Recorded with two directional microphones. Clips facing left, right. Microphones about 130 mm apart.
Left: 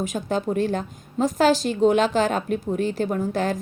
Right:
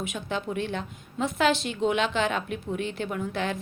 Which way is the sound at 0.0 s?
40° left (ahead or behind).